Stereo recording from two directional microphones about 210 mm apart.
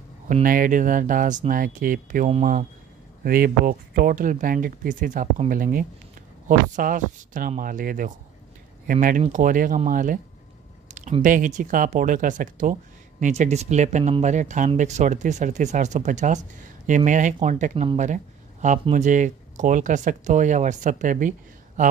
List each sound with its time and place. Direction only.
0.3 s speech: 40° right (ahead or behind)